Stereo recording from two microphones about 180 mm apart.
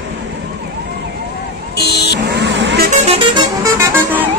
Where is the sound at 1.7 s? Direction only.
65° left (ahead or behind).